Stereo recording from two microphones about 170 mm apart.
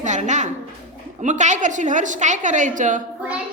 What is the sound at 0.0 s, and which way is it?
A woman's voice, 45° right (ahead or behind).